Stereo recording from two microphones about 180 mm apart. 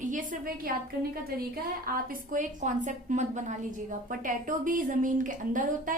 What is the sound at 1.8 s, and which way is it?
A woman's voice, 55° right (ahead or behind).